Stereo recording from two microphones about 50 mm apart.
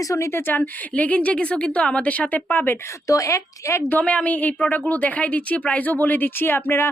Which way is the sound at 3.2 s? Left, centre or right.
Left.